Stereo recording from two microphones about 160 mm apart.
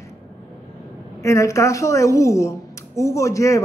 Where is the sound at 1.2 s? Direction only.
20° left (ahead or behind).